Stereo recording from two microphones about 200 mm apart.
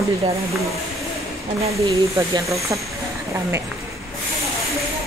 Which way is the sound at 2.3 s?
15° right (ahead or behind).